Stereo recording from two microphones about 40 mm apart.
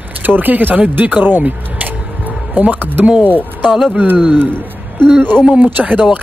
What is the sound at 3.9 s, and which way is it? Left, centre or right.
Speech, right.